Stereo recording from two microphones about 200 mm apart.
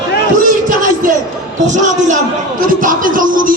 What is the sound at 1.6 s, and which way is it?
Speech, 40° right (ahead or behind).